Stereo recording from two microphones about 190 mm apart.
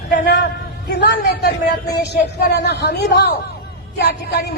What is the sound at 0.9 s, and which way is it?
A man's voice, 60° left (ahead or behind).